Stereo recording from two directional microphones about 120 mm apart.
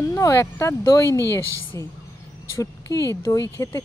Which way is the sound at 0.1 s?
20° left (ahead or behind).